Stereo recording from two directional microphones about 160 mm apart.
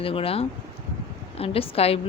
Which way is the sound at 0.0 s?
35° left (ahead or behind).